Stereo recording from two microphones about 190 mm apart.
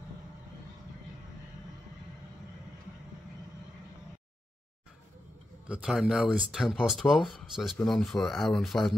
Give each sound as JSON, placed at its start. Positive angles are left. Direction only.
{"t": 5.7, "sound": "speech", "side_deg": 0}